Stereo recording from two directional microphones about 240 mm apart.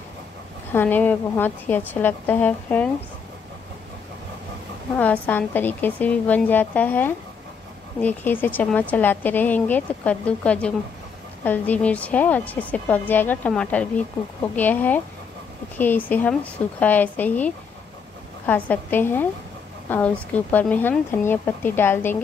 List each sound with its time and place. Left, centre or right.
0.7 s a woman's voice: centre
4.9 s a woman's voice: centre
18.5 s a woman's voice: centre